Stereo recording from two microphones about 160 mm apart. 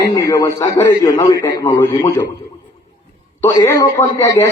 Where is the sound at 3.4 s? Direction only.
20° left (ahead or behind).